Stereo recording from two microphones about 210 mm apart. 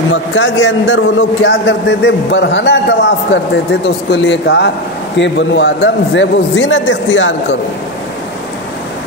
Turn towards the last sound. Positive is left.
turn(degrees=60)  # may be behind; listen again after turning